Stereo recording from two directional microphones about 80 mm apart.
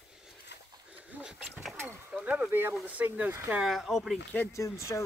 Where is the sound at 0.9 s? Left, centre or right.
Centre.